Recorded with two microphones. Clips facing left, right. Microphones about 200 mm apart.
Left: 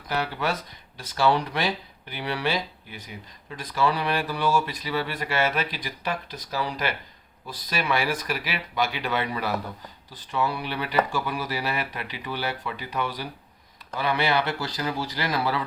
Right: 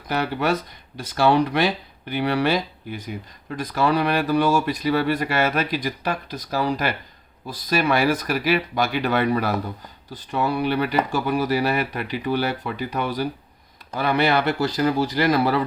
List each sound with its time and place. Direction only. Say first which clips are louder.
1.1 s speech: right 5 dB; 60° right (ahead or behind)